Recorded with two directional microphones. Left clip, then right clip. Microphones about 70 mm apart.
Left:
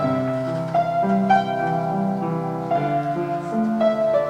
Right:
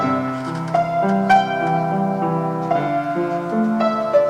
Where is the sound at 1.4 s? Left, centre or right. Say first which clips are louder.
Right 3 dB; right.